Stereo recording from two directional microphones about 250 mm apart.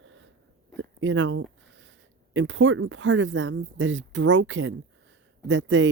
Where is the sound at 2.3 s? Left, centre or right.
Right.